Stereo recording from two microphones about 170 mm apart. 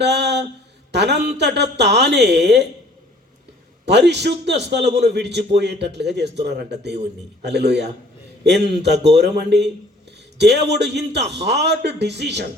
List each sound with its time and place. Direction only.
0.0 s a sound: 90° right
0.9 s a man's voice: 85° right
3.8 s a man's voice: 90° right